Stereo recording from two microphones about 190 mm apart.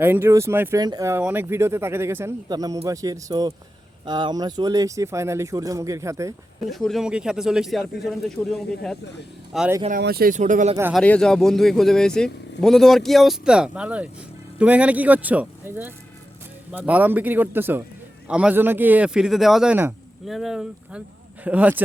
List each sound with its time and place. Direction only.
0.0 s speech: 10° right (ahead or behind)
6.7 s a man's voice: centre (ahead or behind)
10.0 s speech: 55° right (ahead or behind)
10.9 s a man's voice: 5° left (ahead or behind)